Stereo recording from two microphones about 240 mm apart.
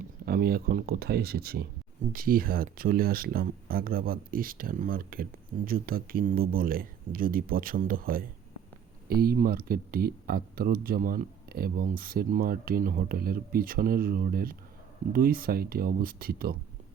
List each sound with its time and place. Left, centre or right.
0.3 s speech: right